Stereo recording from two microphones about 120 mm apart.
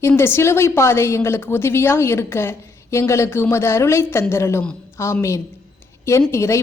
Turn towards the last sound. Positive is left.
turn(degrees=25)  # may be behind; listen again after turning